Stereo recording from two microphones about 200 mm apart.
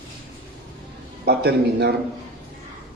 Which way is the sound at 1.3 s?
55° right (ahead or behind).